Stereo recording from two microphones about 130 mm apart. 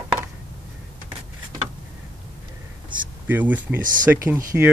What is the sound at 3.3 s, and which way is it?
Speech, 15° right (ahead or behind).